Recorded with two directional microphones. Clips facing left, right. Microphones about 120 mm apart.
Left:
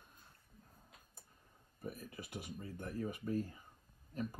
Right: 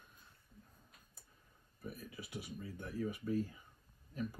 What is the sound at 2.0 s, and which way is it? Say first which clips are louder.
Speech: even; 50° left (ahead or behind).